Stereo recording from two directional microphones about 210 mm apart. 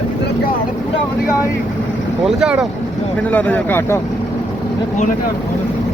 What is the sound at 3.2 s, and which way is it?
Speech, 5° left (ahead or behind).